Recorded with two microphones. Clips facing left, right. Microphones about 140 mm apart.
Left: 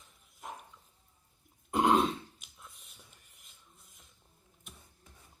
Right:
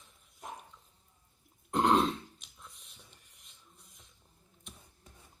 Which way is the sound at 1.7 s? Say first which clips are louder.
Even; centre (ahead or behind).